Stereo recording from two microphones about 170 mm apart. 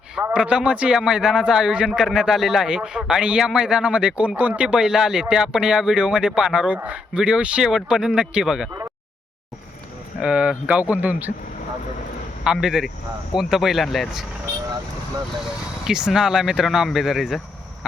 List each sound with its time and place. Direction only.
0.2 s a man's voice: 10° right (ahead or behind)
10.2 s speech: 5° right (ahead or behind)
12.5 s a man's voice: 5° right (ahead or behind)
15.8 s a man's voice: 5° right (ahead or behind)